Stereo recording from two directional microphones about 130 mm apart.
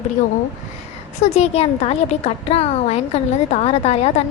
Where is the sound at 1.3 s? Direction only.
55° left (ahead or behind).